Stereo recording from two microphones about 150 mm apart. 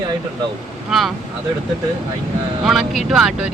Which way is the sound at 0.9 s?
Centre (ahead or behind).